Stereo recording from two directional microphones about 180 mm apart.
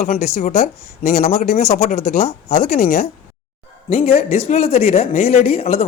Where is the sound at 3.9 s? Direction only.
35° left (ahead or behind).